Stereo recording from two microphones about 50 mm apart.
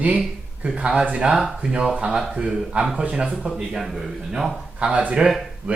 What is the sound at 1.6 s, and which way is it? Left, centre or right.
Speech, centre.